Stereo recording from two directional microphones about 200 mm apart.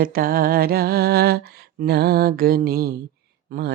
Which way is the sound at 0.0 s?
45° right (ahead or behind).